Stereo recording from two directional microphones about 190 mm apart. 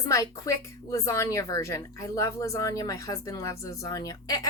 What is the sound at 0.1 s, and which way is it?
A woman's voice, 15° left (ahead or behind).